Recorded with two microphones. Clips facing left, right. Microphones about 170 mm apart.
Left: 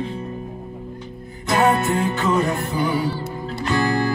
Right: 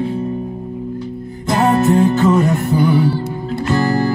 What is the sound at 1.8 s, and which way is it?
Music, 40° right (ahead or behind).